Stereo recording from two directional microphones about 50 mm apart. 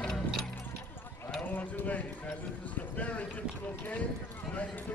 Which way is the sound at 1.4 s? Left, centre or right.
Left.